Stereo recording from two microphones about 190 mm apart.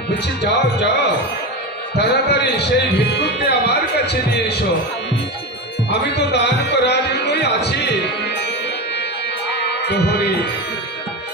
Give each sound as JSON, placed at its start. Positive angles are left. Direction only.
{"t": 0.5, "sound": "speech", "side_deg": 65}
{"t": 2.0, "sound": "a man's voice", "side_deg": 65}
{"t": 5.9, "sound": "music", "side_deg": 60}
{"t": 9.5, "sound": "music", "side_deg": 60}